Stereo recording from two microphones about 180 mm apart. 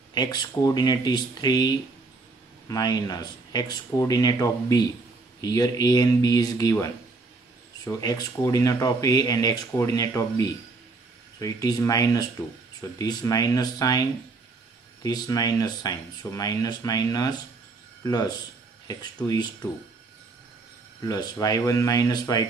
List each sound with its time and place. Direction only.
0.1 s speech: 20° left (ahead or behind)
15.0 s speech: 20° left (ahead or behind)
21.0 s speech: 20° left (ahead or behind)